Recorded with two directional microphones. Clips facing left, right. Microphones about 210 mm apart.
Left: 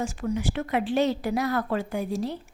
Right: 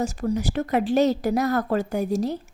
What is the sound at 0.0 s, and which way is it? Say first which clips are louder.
Speech: right 3 dB; 40° right (ahead or behind).